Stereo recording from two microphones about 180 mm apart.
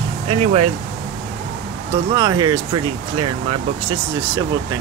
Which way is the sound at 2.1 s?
25° right (ahead or behind).